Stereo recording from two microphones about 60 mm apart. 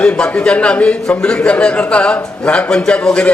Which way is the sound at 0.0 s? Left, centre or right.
Centre.